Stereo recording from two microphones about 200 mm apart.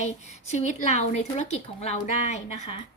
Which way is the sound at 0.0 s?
35° left (ahead or behind).